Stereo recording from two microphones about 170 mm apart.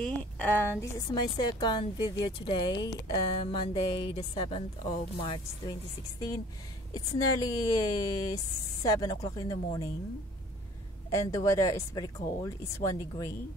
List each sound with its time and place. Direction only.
0.0 s a woman's voice: 5° left (ahead or behind); by 5.8 s 30° left (ahead or behind)
6.9 s a woman's voice: 20° left (ahead or behind)
11.1 s a woman's voice: 20° left (ahead or behind)